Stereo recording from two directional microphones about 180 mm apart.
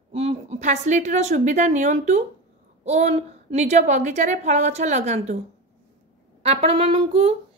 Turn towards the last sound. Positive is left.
turn(degrees=-30)  # may be behind; listen again after turning